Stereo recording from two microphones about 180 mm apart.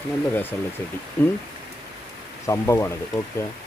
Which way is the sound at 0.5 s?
15° left (ahead or behind).